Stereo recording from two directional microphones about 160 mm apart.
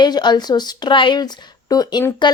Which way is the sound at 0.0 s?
25° left (ahead or behind).